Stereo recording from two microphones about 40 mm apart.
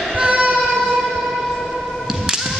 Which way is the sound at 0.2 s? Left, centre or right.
Right.